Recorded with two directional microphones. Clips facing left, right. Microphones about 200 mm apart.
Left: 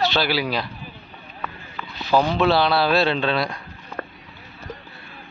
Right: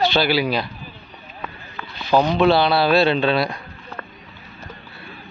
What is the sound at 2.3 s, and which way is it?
Speech, centre (ahead or behind).